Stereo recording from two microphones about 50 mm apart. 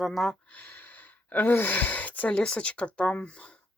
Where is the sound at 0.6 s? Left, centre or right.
Left.